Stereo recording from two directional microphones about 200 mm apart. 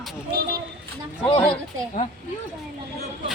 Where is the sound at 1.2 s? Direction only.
10° left (ahead or behind).